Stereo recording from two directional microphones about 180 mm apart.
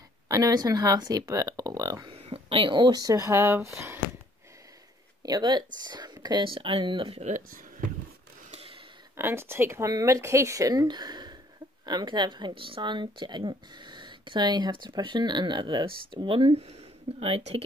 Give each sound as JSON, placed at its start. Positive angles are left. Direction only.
{"t": 0.3, "sound": "speech", "side_deg": -20}
{"t": 5.2, "sound": "speech", "side_deg": -20}
{"t": 8.5, "sound": "a sound", "side_deg": -35}
{"t": 9.1, "sound": "speech", "side_deg": -15}